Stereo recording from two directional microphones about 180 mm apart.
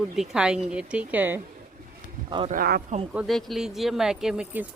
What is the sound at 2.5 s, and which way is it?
Speech, 60° right (ahead or behind).